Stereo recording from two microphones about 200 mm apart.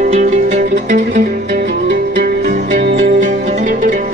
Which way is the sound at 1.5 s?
55° right (ahead or behind).